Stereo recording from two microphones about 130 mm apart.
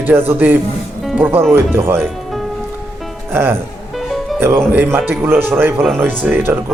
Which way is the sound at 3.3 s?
20° right (ahead or behind).